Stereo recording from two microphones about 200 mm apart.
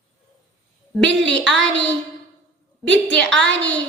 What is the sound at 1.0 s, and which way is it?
Speech, 65° right (ahead or behind).